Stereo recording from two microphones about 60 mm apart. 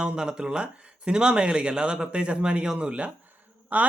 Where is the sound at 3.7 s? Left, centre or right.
Right.